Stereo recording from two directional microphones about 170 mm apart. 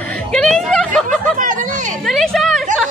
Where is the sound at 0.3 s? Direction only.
Centre (ahead or behind).